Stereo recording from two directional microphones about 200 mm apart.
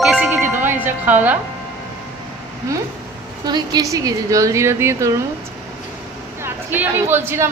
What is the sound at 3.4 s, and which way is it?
A woman's voice, 20° right (ahead or behind).